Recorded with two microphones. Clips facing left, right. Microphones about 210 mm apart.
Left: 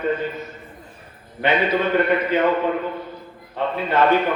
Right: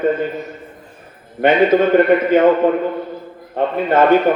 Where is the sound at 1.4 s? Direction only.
50° right (ahead or behind).